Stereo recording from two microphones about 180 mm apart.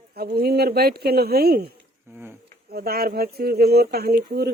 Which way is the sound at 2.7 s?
60° right (ahead or behind).